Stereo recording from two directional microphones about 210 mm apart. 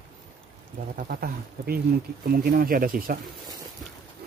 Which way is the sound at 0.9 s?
45° right (ahead or behind).